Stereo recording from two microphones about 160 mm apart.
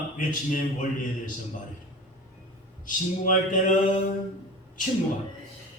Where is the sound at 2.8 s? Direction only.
55° left (ahead or behind).